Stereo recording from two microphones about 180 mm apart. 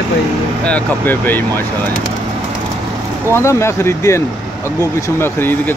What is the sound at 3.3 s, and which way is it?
Speech, 15° left (ahead or behind).